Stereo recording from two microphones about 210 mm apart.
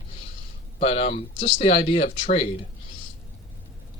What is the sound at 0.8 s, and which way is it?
Speech, 30° left (ahead or behind).